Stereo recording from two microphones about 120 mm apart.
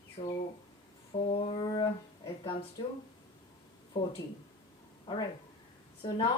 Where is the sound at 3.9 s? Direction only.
40° left (ahead or behind).